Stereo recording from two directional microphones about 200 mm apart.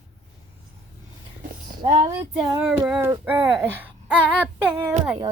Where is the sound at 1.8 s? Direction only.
30° right (ahead or behind).